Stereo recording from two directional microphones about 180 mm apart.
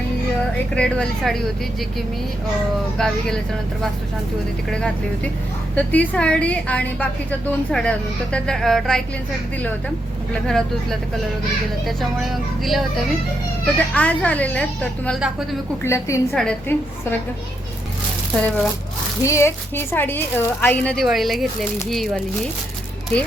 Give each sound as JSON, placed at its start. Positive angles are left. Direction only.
{"t": 0.7, "sound": "speech", "side_deg": 5}
{"t": 3.0, "sound": "speech", "side_deg": 5}
{"t": 4.7, "sound": "a woman's voice", "side_deg": 5}
{"t": 11.9, "sound": "a woman's voice", "side_deg": 0}
{"t": 16.3, "sound": "speech", "side_deg": 5}
{"t": 18.4, "sound": "a woman's voice", "side_deg": 10}